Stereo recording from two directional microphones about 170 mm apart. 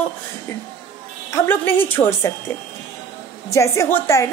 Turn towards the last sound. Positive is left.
turn(degrees=15)  # may be behind; listen again after turning